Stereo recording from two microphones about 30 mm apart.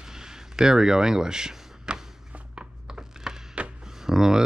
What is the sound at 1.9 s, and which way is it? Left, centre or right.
Walk, right.